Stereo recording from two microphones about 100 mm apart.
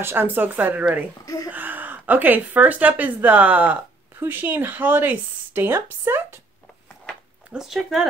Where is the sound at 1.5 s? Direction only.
20° right (ahead or behind).